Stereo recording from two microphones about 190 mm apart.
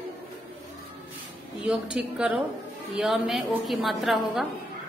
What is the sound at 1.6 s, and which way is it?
A woman's voice, 5° right (ahead or behind).